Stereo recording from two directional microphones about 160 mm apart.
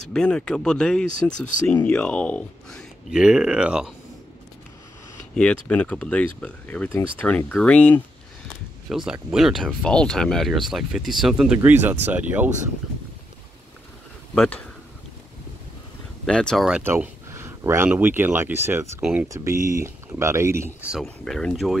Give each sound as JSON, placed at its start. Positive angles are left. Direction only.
{"t": 0.1, "sound": "speech", "side_deg": 5}
{"t": 3.1, "sound": "speech", "side_deg": -5}
{"t": 5.3, "sound": "speech", "side_deg": 5}
{"t": 8.8, "sound": "speech", "side_deg": 0}
{"t": 14.3, "sound": "speech", "side_deg": 5}
{"t": 16.3, "sound": "speech", "side_deg": 5}
{"t": 16.8, "sound": "speech", "side_deg": -15}
{"t": 20.9, "sound": "speech", "side_deg": 0}